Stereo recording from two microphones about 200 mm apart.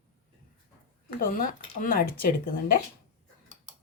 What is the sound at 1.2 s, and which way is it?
Speech, 45° left (ahead or behind).